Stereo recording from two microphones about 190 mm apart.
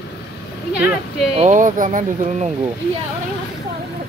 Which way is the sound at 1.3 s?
40° right (ahead or behind).